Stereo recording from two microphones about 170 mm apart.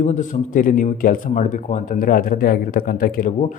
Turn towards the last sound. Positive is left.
turn(degrees=55)  # may be behind; listen again after turning